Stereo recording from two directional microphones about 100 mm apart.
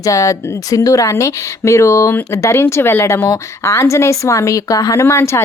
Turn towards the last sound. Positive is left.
turn(degrees=25)  # may be behind; listen again after turning